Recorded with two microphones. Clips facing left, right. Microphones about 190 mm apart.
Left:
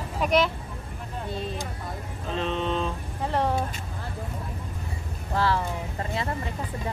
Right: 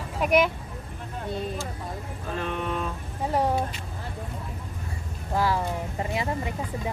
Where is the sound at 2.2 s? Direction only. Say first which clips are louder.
Left 3 dB; 20° left (ahead or behind).